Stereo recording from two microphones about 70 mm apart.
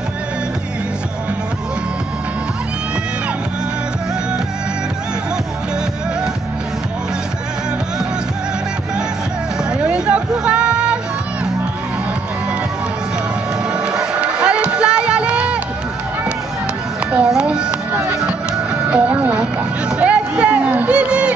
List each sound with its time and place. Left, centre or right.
9.7 s hubbub: centre
13.7 s music: centre
17.3 s music: centre
18.9 s music: right
20.0 s a sound: centre
20.9 s crowd: centre